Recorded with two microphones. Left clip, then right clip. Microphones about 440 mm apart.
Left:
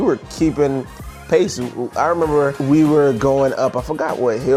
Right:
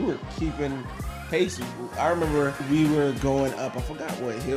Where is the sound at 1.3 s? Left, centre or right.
Left.